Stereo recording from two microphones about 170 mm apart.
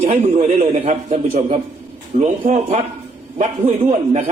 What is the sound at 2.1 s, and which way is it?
A man's voice, 50° right (ahead or behind).